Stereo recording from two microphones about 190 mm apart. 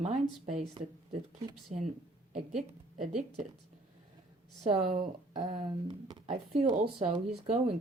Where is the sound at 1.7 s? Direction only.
40° right (ahead or behind).